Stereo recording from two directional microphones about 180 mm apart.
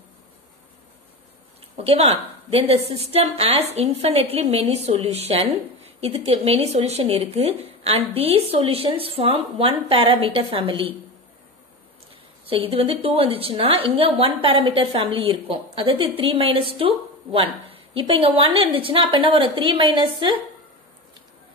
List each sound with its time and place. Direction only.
1.8 s a woman's voice: 35° right (ahead or behind)
12.4 s a woman's voice: 30° right (ahead or behind)